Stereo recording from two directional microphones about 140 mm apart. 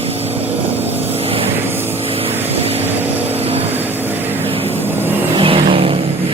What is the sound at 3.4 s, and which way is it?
Vehicle, 45° right (ahead or behind).